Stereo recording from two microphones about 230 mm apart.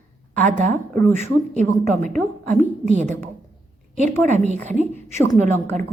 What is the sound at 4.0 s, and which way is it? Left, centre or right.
A woman's voice, right.